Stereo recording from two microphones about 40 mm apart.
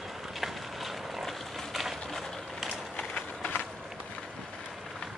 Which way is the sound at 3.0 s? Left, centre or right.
Left.